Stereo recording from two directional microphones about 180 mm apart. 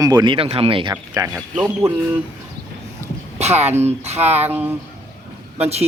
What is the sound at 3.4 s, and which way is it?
Speech, 35° right (ahead or behind).